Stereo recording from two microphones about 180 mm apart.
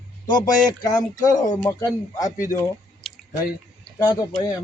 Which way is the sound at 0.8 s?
20° left (ahead or behind).